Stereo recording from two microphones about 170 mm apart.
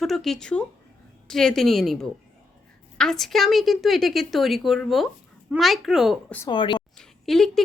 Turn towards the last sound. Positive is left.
turn(degrees=0)  # may be behind; listen again after turning